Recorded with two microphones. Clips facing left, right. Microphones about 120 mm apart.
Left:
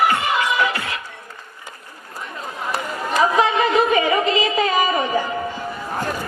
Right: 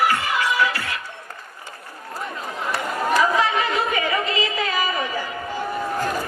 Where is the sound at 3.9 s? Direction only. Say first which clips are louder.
Left 5 dB; 20° left (ahead or behind).